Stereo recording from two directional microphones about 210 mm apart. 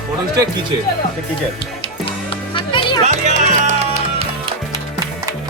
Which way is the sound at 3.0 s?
35° right (ahead or behind).